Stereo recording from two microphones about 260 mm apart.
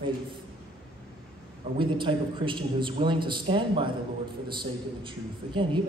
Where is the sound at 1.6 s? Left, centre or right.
Centre.